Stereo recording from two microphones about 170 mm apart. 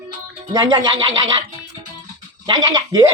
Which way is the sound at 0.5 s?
20° right (ahead or behind).